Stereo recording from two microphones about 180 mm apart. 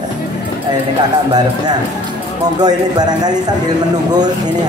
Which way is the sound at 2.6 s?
20° right (ahead or behind).